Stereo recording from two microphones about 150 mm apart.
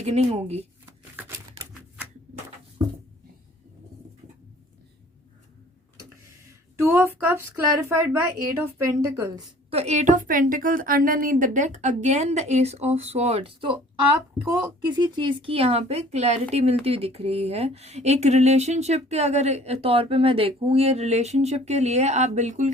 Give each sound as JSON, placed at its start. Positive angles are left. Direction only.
{"t": 0.0, "sound": "speech", "side_deg": -45}
{"t": 6.7, "sound": "a woman's voice", "side_deg": -15}
{"t": 9.6, "sound": "speech", "side_deg": -45}